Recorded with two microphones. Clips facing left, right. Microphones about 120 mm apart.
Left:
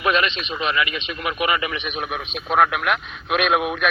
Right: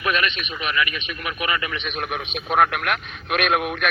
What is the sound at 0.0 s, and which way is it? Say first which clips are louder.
A man's voice: left 3 dB; 25° left (ahead or behind).